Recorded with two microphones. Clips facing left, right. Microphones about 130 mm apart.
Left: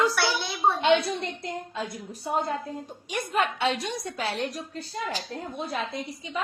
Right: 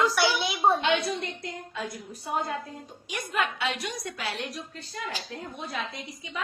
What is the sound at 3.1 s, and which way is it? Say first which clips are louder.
A woman's voice: left 3 dB; 30° left (ahead or behind).